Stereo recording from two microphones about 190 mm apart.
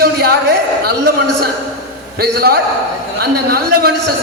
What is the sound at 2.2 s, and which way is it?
A man's voice, 55° right (ahead or behind).